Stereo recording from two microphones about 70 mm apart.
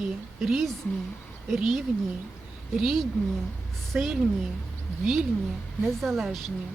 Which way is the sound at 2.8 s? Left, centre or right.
Centre.